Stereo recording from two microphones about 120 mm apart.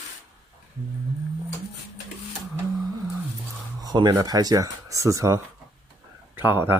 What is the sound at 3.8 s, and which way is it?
Speech, 30° right (ahead or behind).